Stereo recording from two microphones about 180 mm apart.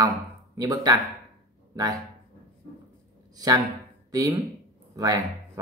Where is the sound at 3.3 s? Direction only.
20° right (ahead or behind).